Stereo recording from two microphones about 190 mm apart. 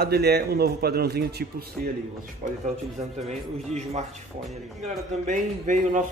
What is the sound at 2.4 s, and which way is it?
Speech, 40° right (ahead or behind).